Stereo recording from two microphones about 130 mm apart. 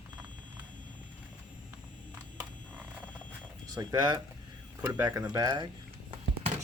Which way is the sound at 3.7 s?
30° right (ahead or behind).